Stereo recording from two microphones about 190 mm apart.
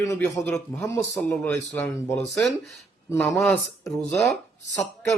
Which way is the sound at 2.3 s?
Centre (ahead or behind).